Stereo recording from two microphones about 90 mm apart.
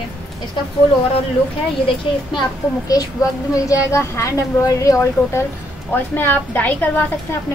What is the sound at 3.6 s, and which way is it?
A woman's voice, 35° left (ahead or behind).